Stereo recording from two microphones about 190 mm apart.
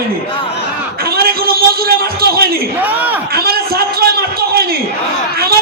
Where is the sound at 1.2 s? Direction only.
55° right (ahead or behind).